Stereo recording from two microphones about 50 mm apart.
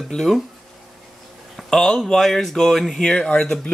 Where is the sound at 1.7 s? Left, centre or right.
Centre.